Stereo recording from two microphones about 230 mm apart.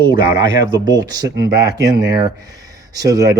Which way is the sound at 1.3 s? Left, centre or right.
Right.